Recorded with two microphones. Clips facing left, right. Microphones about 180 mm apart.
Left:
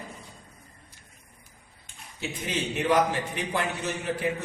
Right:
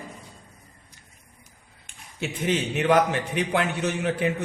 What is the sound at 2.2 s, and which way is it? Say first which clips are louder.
A man's voice: right 6 dB; 65° right (ahead or behind).